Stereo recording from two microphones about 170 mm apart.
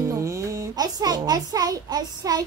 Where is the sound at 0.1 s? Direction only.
20° right (ahead or behind).